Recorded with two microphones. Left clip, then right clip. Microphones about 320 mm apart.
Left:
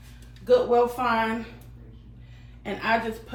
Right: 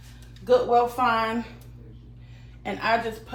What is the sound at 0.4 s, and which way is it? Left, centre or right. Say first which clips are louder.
Speech: even; centre.